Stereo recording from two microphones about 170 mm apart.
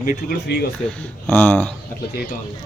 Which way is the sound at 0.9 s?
10° left (ahead or behind).